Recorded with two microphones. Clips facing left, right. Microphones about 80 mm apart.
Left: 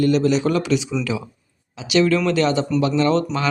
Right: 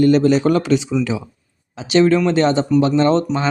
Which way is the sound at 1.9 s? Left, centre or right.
Right.